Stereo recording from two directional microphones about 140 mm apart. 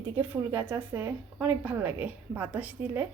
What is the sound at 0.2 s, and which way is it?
A woman's voice, 15° right (ahead or behind).